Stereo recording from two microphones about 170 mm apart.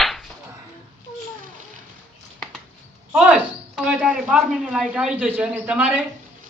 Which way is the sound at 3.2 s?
5° right (ahead or behind).